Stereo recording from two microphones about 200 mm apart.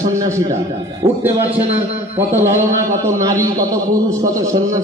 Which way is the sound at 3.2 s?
15° right (ahead or behind).